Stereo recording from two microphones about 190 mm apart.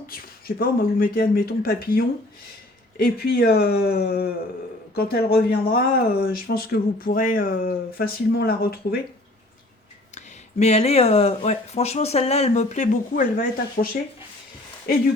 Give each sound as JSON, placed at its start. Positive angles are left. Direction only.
{"t": 0.1, "sound": "speech", "side_deg": 50}
{"t": 10.2, "sound": "speech", "side_deg": 35}